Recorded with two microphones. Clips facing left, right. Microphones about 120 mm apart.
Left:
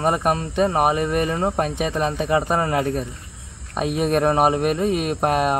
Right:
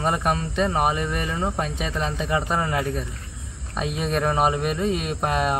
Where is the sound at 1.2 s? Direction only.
30° left (ahead or behind).